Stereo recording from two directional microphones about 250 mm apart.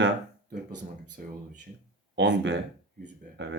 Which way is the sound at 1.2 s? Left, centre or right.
Right.